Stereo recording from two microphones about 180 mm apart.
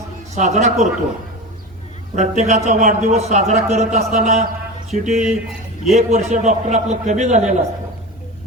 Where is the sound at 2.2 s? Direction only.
40° right (ahead or behind).